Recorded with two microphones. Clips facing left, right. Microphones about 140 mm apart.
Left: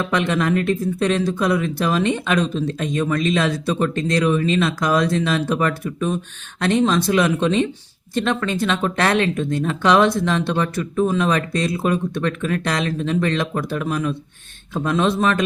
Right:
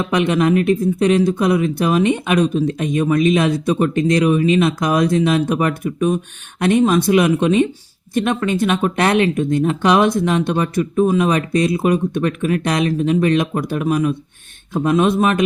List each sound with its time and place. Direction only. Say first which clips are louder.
0.0 s speech: right 4 dB; 20° right (ahead or behind)